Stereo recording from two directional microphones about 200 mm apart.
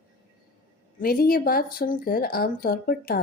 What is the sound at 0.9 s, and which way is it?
Speech, 50° left (ahead or behind).